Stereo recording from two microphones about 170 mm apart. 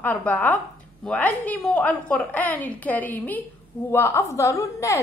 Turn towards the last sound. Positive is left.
turn(degrees=20)  # may be behind; listen again after turning